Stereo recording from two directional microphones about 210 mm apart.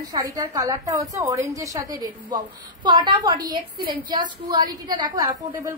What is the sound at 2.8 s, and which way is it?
A woman's voice, 20° right (ahead or behind).